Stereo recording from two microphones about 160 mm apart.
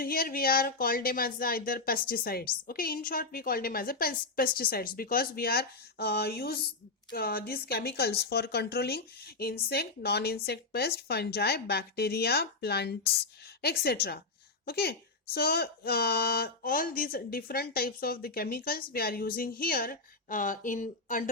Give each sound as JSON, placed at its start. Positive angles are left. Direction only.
{"t": 0.0, "sound": "speech", "side_deg": 65}
{"t": 13.6, "sound": "speech", "side_deg": 80}